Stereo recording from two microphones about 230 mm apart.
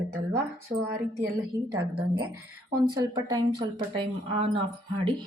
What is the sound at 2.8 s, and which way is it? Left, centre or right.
Speech, centre.